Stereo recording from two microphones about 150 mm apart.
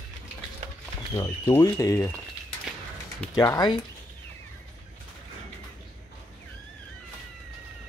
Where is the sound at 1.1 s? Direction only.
25° left (ahead or behind).